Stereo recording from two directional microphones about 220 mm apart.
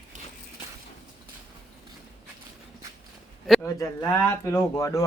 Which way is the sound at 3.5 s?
10° left (ahead or behind).